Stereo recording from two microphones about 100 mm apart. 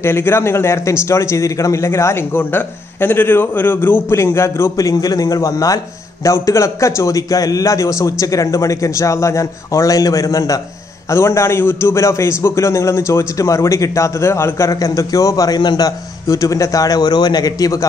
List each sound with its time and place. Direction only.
0.0 s a man's voice: 25° left (ahead or behind)